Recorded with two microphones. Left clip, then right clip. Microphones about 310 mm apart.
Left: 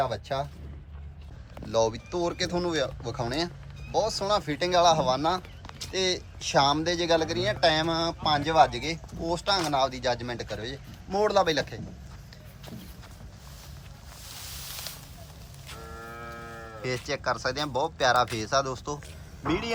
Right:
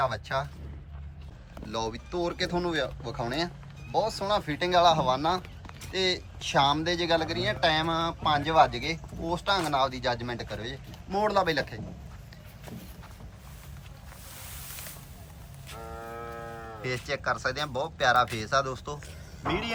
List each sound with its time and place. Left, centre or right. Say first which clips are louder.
0.0 s speech: even; centre
1.6 s speech: left 7 dB; centre
16.0 s a sound: right 1 dB; centre
16.8 s speech: left 1 dB; centre